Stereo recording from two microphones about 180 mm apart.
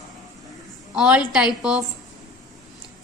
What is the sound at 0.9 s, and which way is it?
Speech, 5° right (ahead or behind).